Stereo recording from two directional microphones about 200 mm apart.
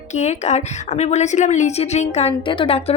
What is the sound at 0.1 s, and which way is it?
A woman's voice, 35° left (ahead or behind).